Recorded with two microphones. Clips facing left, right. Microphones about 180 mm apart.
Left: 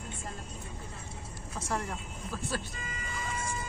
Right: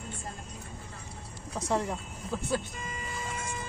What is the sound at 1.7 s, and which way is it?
Speech, 20° right (ahead or behind).